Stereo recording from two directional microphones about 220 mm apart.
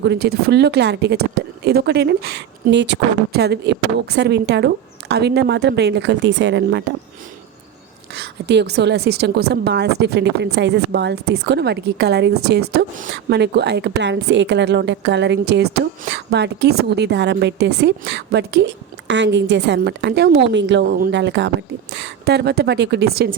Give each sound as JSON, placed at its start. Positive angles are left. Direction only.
{"t": 0.0, "sound": "a woman's voice", "side_deg": -50}
{"t": 8.1, "sound": "a woman's voice", "side_deg": -50}